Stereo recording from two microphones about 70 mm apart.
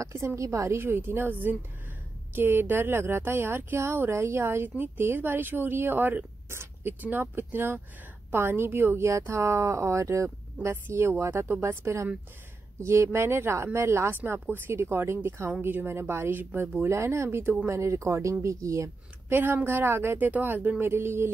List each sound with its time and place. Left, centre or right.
0.0 s speech: right
0.7 s speech: right
19.2 s speech: right
20.8 s speech: right